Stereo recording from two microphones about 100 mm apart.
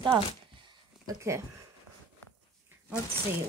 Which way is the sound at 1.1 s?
30° right (ahead or behind).